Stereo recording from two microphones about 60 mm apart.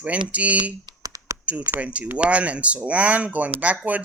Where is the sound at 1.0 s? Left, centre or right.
Right.